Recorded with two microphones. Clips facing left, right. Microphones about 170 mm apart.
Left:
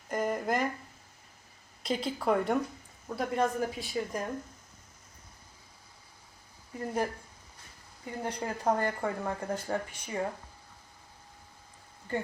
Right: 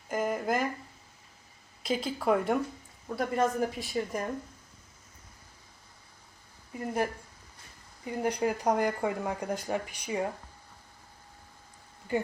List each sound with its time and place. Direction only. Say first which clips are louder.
0.1 s a sound: right 1 dB; 5° right (ahead or behind)
1.8 s speech: right 1 dB; centre (ahead or behind)
6.7 s speech: right 1 dB; 10° right (ahead or behind)
8.2 s speech: right 4 dB; 15° right (ahead or behind)